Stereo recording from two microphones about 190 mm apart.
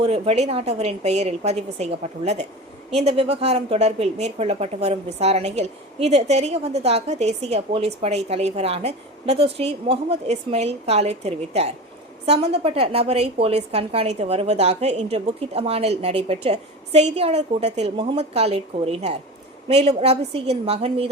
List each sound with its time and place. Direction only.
0.0 s speech: 30° right (ahead or behind)